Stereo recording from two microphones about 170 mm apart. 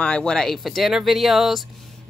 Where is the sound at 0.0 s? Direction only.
5° left (ahead or behind).